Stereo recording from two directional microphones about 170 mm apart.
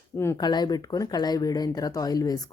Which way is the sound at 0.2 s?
20° left (ahead or behind).